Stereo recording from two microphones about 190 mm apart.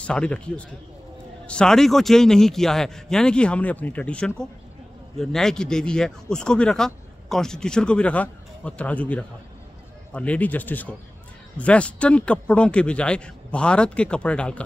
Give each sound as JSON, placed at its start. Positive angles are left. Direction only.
{"t": 0.0, "sound": "a man's voice", "side_deg": 5}